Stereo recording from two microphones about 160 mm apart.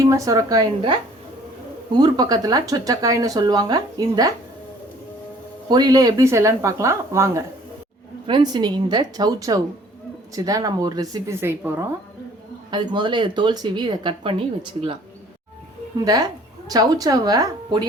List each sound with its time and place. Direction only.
0.0 s speech: 20° right (ahead or behind)
1.9 s speech: 25° right (ahead or behind)
5.6 s speech: 25° right (ahead or behind)
12.7 s speech: 30° right (ahead or behind)
16.0 s a woman's voice: 25° right (ahead or behind)